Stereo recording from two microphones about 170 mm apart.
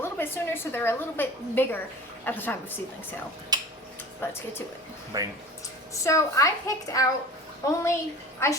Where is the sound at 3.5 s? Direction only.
25° right (ahead or behind).